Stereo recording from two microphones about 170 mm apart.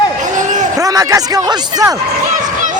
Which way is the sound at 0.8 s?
20° right (ahead or behind).